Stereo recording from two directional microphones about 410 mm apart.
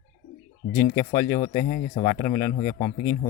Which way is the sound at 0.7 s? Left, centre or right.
Centre.